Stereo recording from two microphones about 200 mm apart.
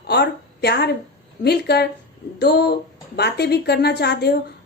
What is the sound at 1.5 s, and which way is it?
A woman's voice, 55° left (ahead or behind).